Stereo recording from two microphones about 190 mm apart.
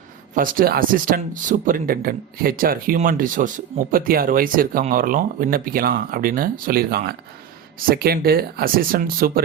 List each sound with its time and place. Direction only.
0.3 s speech: 45° right (ahead or behind)